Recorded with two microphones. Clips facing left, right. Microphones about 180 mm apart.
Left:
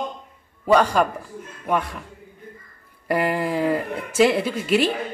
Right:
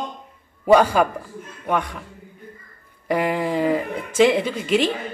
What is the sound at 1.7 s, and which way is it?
Speech, 5° left (ahead or behind).